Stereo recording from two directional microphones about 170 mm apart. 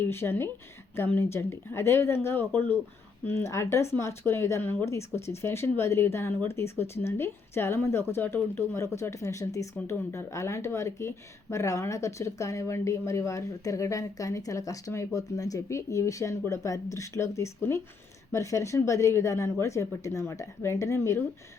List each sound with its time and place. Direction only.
0.0 s speech: 15° left (ahead or behind)